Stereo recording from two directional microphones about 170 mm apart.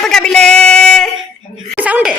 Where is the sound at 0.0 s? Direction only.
5° left (ahead or behind).